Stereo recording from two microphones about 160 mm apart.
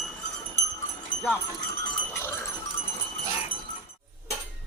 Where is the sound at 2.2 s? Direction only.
15° left (ahead or behind).